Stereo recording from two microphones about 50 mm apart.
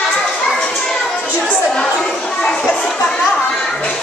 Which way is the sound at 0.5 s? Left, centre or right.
Centre.